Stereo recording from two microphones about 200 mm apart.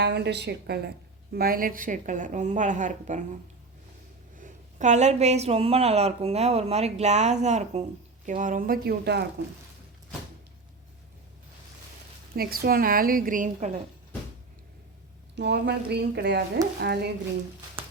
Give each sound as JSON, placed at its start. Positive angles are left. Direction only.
{"t": 0.0, "sound": "a woman's voice", "side_deg": -55}
{"t": 4.4, "sound": "a woman's voice", "side_deg": -40}
{"t": 12.4, "sound": "a woman's voice", "side_deg": -50}
{"t": 15.4, "sound": "speech", "side_deg": -55}